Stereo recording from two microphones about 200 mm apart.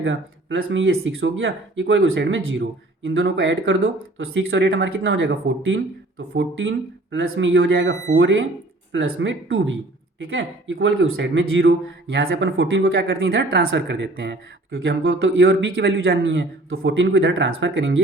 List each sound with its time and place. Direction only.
0.0 s speech: 75° right (ahead or behind)
8.9 s speech: 85° right; by 15.9 s 55° right (ahead or behind)
15.9 s speech: 70° right (ahead or behind)